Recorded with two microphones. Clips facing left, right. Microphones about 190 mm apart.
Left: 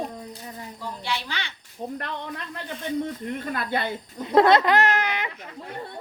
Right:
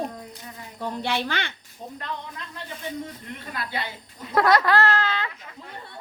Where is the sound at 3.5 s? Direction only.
55° left (ahead or behind).